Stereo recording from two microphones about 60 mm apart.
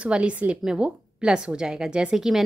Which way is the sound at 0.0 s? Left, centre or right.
Centre.